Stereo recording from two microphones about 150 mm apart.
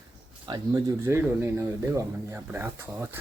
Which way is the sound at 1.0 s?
15° right (ahead or behind).